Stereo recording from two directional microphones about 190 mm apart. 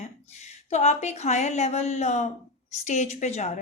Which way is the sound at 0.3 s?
35° left (ahead or behind).